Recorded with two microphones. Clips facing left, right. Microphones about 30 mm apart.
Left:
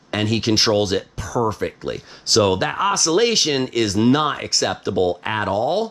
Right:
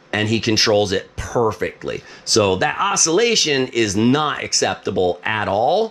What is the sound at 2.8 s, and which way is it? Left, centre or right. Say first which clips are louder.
Speech: left 3 dB; centre.